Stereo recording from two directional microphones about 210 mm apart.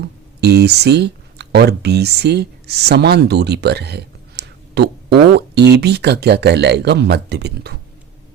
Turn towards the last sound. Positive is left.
turn(degrees=-50)  # may be behind; listen again after turning